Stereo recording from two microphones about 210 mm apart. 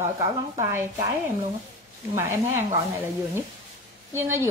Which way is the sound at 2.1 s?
10° right (ahead or behind).